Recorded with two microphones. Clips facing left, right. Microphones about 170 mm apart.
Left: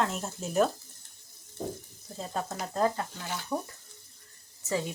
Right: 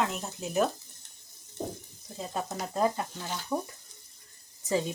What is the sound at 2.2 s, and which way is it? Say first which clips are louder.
Frying: even; 10° right (ahead or behind).